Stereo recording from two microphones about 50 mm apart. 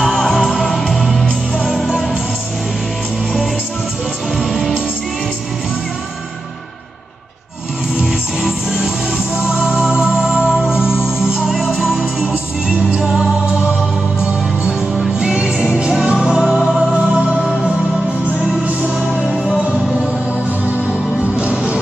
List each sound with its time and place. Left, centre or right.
0.0 s music: centre
4.4 s music: centre
8.4 s music: centre
15.1 s music: centre
18.8 s music: centre
20.6 s music: right